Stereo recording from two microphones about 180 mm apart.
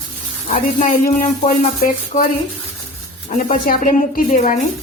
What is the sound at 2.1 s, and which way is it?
Stir, 40° left (ahead or behind).